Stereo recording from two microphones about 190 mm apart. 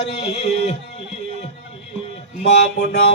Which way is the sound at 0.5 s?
30° left (ahead or behind).